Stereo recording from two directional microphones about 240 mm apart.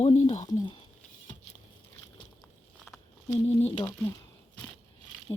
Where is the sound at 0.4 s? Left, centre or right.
Centre.